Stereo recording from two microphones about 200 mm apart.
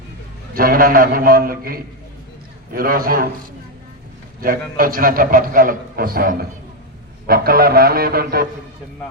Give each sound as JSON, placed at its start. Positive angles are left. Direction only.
{"t": 0.5, "sound": "a man's voice", "side_deg": -45}
{"t": 4.4, "sound": "a man's voice", "side_deg": -45}